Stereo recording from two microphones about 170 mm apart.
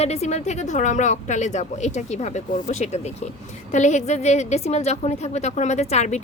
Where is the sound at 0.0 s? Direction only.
40° left (ahead or behind).